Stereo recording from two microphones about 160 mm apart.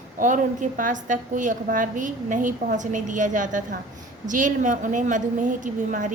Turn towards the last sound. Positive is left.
turn(degrees=-55)  # may be behind; listen again after turning